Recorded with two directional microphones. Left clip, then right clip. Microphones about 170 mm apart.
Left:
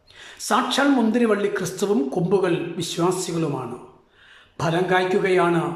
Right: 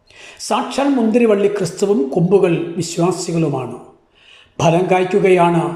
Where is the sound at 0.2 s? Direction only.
10° right (ahead or behind).